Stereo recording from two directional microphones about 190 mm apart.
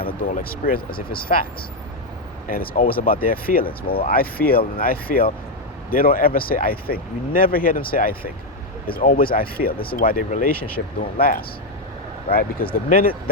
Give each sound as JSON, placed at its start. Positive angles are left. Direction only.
{"t": 0.0, "sound": "speech", "side_deg": 50}
{"t": 2.5, "sound": "speech", "side_deg": 50}